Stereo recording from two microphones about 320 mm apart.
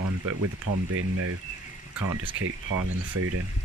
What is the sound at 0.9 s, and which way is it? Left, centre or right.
Speech, right.